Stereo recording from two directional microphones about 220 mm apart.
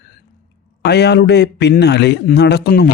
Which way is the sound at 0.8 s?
50° left (ahead or behind).